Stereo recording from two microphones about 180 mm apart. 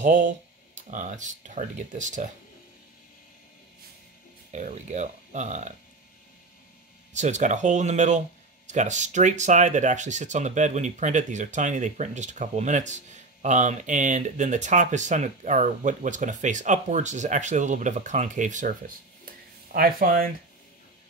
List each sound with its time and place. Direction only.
0.0 s speech: 45° right (ahead or behind)
4.5 s speech: 40° right (ahead or behind)
7.2 s speech: 40° right (ahead or behind)
19.2 s a sound: 55° right (ahead or behind)